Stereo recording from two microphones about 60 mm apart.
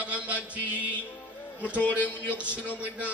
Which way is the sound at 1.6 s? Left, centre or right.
Left.